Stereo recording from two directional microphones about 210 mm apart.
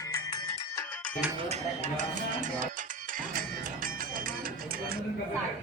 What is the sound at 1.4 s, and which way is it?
Speech, 30° right (ahead or behind).